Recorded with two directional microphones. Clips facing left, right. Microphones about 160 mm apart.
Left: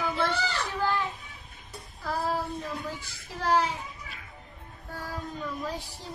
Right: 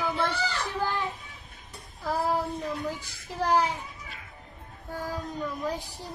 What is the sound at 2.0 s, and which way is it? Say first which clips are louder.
Child singing: right 3 dB; 20° right (ahead or behind).